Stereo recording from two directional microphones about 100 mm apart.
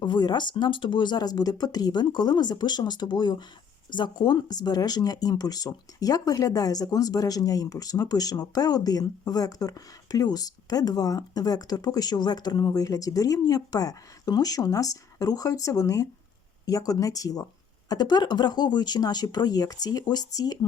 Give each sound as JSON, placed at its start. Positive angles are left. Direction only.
{"t": 0.0, "sound": "speech", "side_deg": 45}